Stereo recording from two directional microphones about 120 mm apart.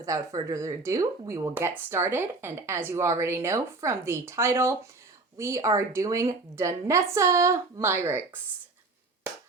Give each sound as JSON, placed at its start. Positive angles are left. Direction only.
{"t": 0.0, "sound": "a woman's voice", "side_deg": -25}